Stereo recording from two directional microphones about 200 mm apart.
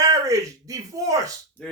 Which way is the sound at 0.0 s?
15° right (ahead or behind).